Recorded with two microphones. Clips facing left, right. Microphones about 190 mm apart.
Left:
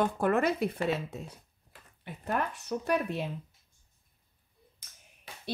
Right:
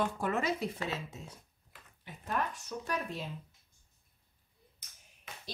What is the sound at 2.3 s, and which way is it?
Speech, 60° left (ahead or behind).